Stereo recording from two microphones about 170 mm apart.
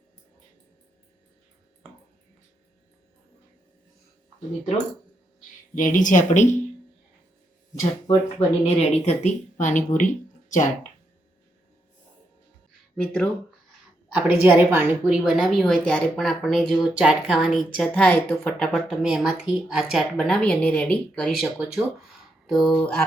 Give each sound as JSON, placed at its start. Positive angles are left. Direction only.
{"t": 5.7, "sound": "speech", "side_deg": 50}
{"t": 8.0, "sound": "speech", "side_deg": 35}
{"t": 13.0, "sound": "speech", "side_deg": 10}
{"t": 14.1, "sound": "a woman's voice", "side_deg": -10}